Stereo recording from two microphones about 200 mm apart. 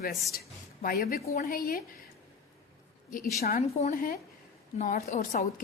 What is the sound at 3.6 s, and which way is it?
A woman's voice, 30° left (ahead or behind).